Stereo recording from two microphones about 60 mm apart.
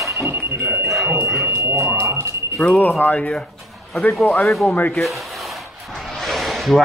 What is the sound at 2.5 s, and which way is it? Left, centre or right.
Speech, centre.